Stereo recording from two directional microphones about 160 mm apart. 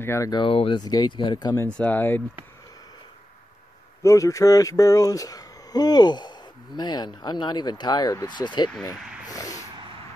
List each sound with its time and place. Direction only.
0.0 s speech: 20° left (ahead or behind)
0.4 s speech: 35° left (ahead or behind)
1.7 s speech: 10° left (ahead or behind)
4.0 s speech: 20° left (ahead or behind)
8.8 s a sound: 20° left (ahead or behind)